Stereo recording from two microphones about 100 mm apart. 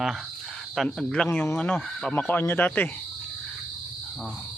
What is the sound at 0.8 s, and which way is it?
Speech, 10° left (ahead or behind).